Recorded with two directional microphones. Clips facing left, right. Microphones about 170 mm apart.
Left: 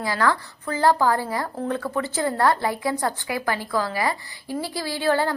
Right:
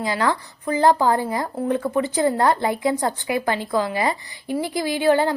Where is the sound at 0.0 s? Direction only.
20° right (ahead or behind).